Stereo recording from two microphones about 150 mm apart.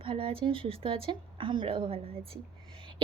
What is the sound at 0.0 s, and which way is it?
Speech, 35° right (ahead or behind).